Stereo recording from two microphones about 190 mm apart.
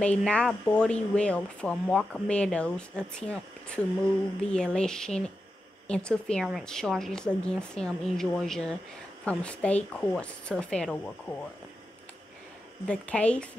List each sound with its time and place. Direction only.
0.0 s a woman's voice: 5° left (ahead or behind)
12.8 s speech: 5° left (ahead or behind)